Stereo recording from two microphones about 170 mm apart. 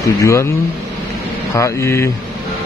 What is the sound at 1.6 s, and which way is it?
Speech, 15° left (ahead or behind).